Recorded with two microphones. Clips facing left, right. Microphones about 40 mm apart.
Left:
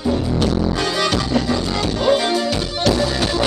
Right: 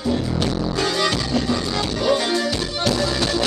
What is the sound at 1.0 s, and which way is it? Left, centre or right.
Music, left.